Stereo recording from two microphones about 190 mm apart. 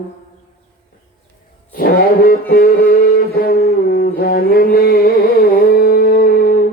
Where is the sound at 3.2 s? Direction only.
55° left (ahead or behind).